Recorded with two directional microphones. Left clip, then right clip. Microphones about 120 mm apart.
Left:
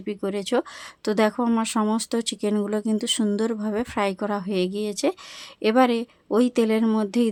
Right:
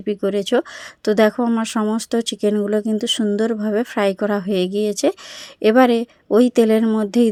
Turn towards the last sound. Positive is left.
turn(degrees=-30)  # may be behind; listen again after turning